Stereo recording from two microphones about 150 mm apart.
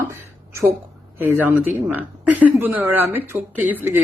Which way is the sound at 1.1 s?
15° right (ahead or behind).